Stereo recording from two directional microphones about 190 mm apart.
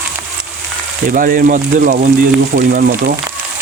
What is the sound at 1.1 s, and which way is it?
Speech, 50° right (ahead or behind).